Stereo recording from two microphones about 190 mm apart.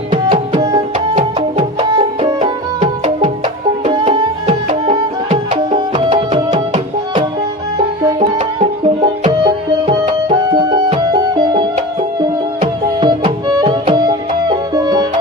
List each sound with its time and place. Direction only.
0.3 s music: 25° right (ahead or behind)
2.2 s music: 30° right (ahead or behind)
9.0 s music: 30° right (ahead or behind)
13.0 s music: 25° right (ahead or behind)